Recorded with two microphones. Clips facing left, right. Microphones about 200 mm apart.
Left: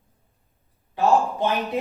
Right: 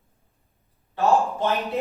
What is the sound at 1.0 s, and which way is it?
Speech, 15° left (ahead or behind).